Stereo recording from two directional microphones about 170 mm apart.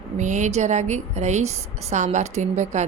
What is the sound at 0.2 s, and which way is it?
A woman's voice, 45° right (ahead or behind).